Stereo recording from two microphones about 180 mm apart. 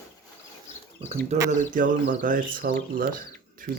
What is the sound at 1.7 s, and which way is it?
Speech, 45° right (ahead or behind).